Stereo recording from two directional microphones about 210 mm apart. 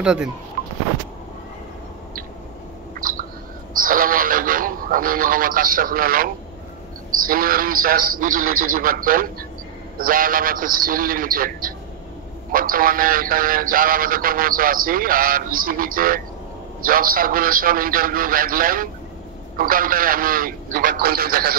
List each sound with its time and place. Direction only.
0.0 s speech: 5° right (ahead or behind)
3.0 s a sound: 40° right (ahead or behind)
3.7 s radio: 40° right (ahead or behind)
7.2 s speech: 40° right (ahead or behind)